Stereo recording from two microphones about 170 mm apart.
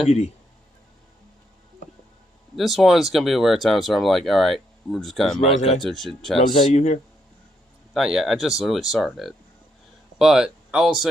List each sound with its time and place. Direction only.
2.6 s speech: centre (ahead or behind)
5.5 s speech: 45° left (ahead or behind)
5.8 s speech: centre (ahead or behind)
6.7 s speech: 40° left (ahead or behind)
7.9 s speech: 5° right (ahead or behind)